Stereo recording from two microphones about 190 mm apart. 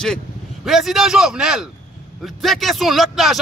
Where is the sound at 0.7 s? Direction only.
Centre (ahead or behind).